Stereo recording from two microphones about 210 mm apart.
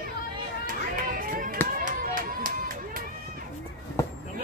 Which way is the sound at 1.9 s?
40° right (ahead or behind).